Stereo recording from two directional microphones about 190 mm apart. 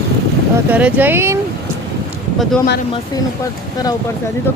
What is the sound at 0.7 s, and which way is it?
Speech, 10° right (ahead or behind).